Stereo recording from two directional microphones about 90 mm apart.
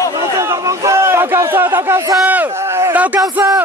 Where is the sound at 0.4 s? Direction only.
35° right (ahead or behind).